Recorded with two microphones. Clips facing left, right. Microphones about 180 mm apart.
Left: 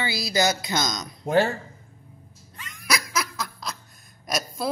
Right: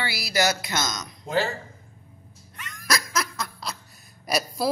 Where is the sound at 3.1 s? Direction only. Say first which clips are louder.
Even; centre (ahead or behind).